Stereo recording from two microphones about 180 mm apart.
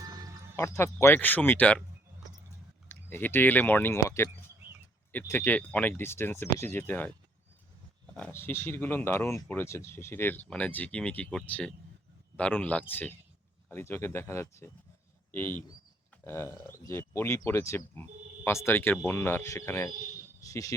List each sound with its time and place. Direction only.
0.0 s music: 20° right (ahead or behind)
0.5 s speech: 15° left (ahead or behind)
2.9 s speech: 10° left (ahead or behind)
8.1 s speech: 10° left (ahead or behind)